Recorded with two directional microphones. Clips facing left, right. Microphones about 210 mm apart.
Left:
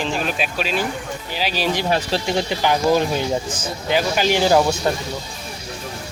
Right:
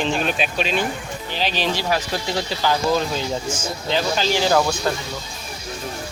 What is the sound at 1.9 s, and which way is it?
Speech, 25° left (ahead or behind).